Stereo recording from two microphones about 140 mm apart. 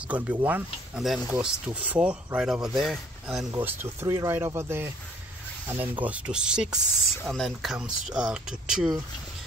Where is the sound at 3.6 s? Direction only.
15° right (ahead or behind).